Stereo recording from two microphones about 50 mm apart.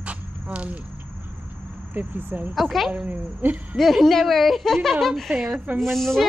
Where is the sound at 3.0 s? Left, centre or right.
Right.